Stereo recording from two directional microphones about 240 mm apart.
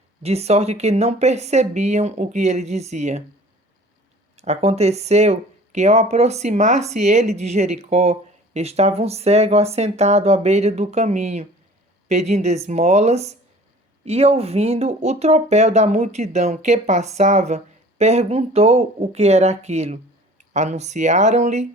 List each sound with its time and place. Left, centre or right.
0.2 s speech: right
4.4 s speech: right